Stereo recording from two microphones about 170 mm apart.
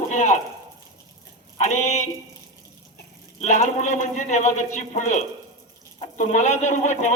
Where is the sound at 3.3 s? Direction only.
45° left (ahead or behind).